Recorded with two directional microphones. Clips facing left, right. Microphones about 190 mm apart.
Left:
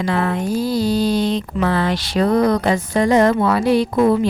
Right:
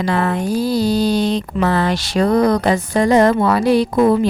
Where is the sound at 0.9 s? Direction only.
75° right (ahead or behind).